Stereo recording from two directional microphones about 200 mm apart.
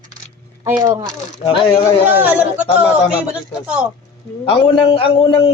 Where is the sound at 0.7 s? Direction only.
15° right (ahead or behind).